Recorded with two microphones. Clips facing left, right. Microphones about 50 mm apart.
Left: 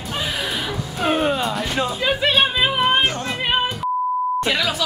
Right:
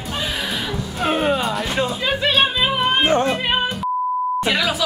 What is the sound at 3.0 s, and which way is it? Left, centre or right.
Music, right.